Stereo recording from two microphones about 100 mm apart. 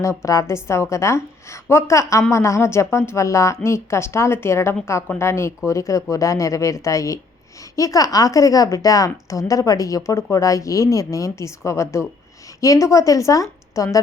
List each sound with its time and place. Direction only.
0.0 s a woman's voice: 30° left (ahead or behind)